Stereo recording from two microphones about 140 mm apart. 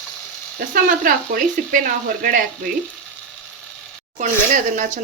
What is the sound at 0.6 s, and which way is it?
Speech, 90° right.